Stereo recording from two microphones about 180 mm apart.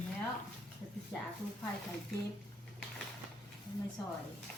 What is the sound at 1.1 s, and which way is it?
Speech, 15° left (ahead or behind).